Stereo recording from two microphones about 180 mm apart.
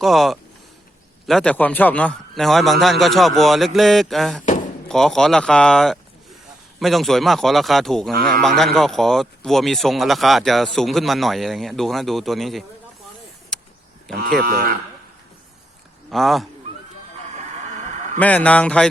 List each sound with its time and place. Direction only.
0.0 s speech: centre (ahead or behind)
13.5 s a sound: 5° left (ahead or behind)
14.2 s speech: 55° right (ahead or behind)
16.0 s speech: centre (ahead or behind)
18.2 s speech: 10° left (ahead or behind)